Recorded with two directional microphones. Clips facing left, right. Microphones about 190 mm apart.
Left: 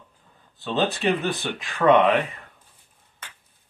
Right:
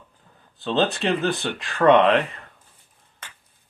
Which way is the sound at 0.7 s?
Centre (ahead or behind).